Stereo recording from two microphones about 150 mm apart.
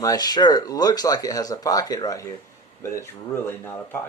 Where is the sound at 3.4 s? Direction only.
15° left (ahead or behind).